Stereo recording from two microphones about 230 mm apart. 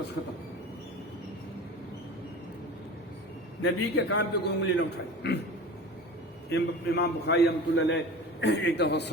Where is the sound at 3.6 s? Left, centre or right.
Left.